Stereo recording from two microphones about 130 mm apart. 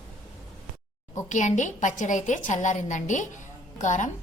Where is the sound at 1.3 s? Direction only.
70° left (ahead or behind).